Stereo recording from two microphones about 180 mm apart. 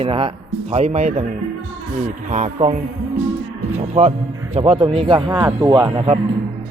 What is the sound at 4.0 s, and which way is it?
Speech, 30° right (ahead or behind).